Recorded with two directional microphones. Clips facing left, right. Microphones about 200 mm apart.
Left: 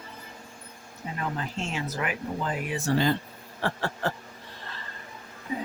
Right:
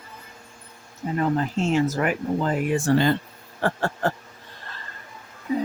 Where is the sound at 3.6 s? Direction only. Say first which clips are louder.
Right 5 dB; 50° right (ahead or behind).